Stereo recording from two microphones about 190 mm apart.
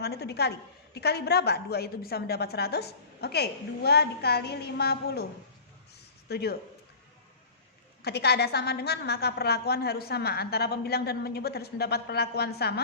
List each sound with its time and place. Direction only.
0.0 s a woman's voice: 60° left (ahead or behind)
6.2 s speech: 55° left (ahead or behind)
8.0 s a woman's voice: 60° left (ahead or behind)